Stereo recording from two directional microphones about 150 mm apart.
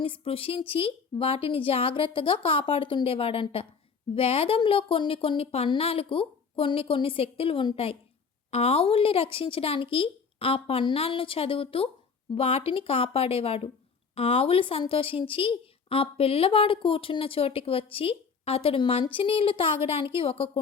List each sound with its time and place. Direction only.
0.0 s a woman's voice: 40° left (ahead or behind)